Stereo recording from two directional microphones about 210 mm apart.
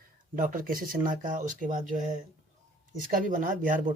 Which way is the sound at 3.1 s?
40° right (ahead or behind).